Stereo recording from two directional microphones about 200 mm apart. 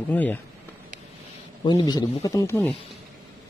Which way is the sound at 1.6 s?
20° left (ahead or behind).